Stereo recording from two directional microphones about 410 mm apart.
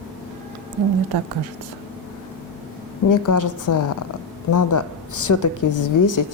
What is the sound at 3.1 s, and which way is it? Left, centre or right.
A woman's voice, left.